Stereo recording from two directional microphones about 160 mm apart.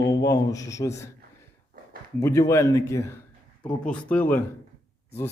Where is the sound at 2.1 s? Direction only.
20° left (ahead or behind).